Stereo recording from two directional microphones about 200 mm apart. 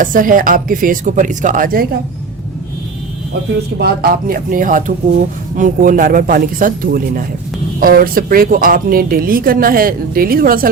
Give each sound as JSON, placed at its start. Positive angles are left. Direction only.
{"t": 0.0, "sound": "speech", "side_deg": -45}
{"t": 3.8, "sound": "speech", "side_deg": -50}